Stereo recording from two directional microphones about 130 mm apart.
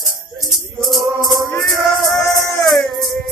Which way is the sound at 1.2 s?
Centre (ahead or behind).